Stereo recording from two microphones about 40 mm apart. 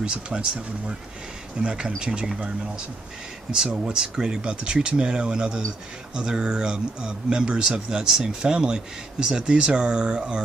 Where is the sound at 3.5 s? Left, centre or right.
Right.